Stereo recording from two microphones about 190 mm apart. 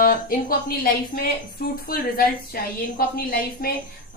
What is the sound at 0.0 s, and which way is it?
Speech, 50° left (ahead or behind).